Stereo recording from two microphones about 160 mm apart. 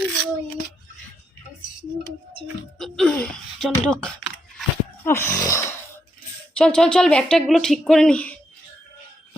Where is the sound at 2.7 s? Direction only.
5° left (ahead or behind).